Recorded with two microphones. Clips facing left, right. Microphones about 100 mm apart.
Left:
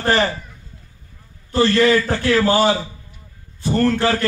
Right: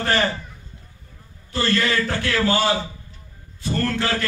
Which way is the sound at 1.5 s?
35° left (ahead or behind).